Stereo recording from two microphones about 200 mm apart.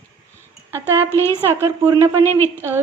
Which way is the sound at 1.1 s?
15° left (ahead or behind).